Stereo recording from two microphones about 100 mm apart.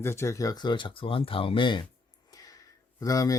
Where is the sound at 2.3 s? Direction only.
35° left (ahead or behind).